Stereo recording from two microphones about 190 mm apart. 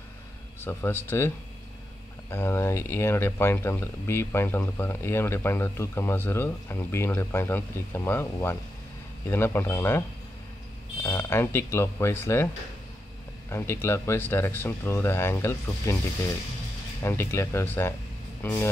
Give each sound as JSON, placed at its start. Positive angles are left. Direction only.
{"t": 0.6, "sound": "speech", "side_deg": 10}
{"t": 11.1, "sound": "speech", "side_deg": 10}
{"t": 13.5, "sound": "speech", "side_deg": 15}
{"t": 17.0, "sound": "speech", "side_deg": 15}